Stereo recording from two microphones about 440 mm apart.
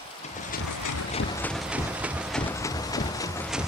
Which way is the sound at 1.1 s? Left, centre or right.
Centre.